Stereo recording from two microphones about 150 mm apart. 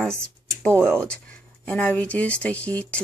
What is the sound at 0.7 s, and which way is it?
Speech, 15° right (ahead or behind).